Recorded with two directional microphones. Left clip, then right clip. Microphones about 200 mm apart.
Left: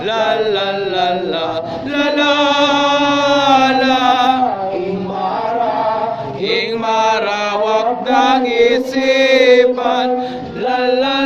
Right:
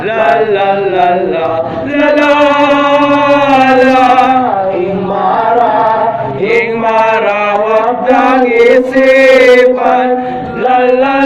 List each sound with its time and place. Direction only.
2.0 s chant: 30° left (ahead or behind)
8.0 s chant: 25° left (ahead or behind)
10.7 s music: 30° left (ahead or behind)